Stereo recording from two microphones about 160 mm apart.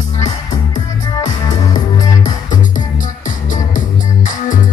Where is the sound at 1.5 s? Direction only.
25° left (ahead or behind).